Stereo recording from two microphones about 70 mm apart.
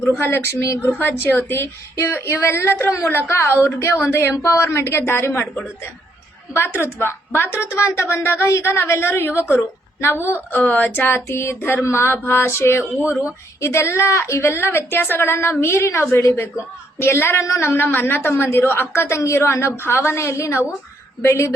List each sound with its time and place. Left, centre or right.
0.0 s a woman's voice: left
0.7 s speech: left
0.9 s a woman's voice: left
6.8 s a woman's voice: left
7.7 s a woman's voice: left
10.7 s a woman's voice: left